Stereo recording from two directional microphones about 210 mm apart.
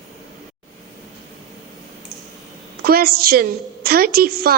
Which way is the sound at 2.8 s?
45° right (ahead or behind).